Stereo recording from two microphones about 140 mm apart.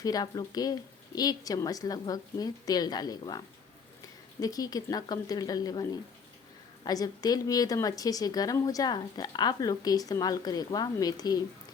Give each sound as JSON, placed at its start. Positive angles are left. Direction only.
{"t": 0.0, "sound": "a woman's voice", "side_deg": 30}